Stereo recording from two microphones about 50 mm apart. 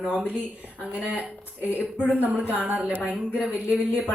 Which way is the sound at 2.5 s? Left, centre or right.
Right.